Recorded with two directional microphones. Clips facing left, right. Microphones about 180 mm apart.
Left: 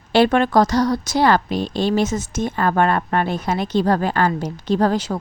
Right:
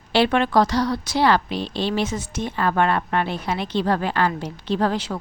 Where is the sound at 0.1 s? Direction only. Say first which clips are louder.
Left 3 dB; 45° left (ahead or behind).